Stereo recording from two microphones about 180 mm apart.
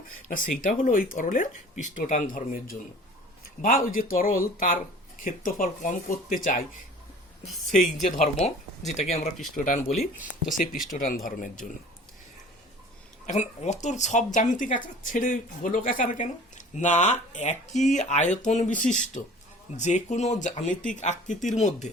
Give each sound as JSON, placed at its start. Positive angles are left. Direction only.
{"t": 0.3, "sound": "speech", "side_deg": 50}
{"t": 8.1, "sound": "speech", "side_deg": 40}
{"t": 9.6, "sound": "speech", "side_deg": 45}
{"t": 10.5, "sound": "speech", "side_deg": 50}
{"t": 13.2, "sound": "speech", "side_deg": 40}